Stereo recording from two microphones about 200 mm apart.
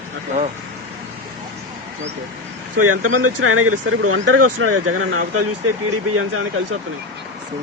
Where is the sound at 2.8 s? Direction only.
90° right.